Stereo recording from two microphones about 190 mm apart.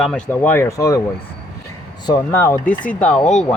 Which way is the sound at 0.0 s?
5° left (ahead or behind).